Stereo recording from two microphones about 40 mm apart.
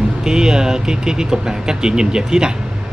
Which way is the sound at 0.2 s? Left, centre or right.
Centre.